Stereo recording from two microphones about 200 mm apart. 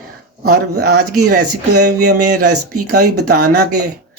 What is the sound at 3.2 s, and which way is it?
Speech, 90° right.